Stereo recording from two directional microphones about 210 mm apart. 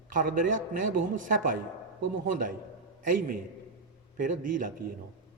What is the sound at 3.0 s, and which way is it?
Speech, 40° right (ahead or behind).